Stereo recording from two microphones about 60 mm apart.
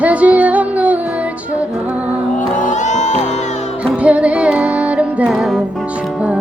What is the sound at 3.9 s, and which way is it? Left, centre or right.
Music, right.